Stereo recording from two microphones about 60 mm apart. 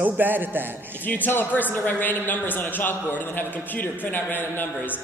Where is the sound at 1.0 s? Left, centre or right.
Left.